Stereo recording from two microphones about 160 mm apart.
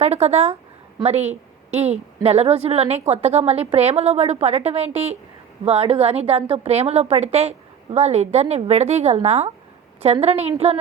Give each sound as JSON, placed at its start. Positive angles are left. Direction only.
{"t": 0.0, "sound": "a woman's voice", "side_deg": -40}